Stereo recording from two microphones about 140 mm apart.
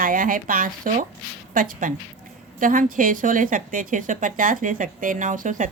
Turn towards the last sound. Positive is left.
turn(degrees=-65)  # may be behind; listen again after turning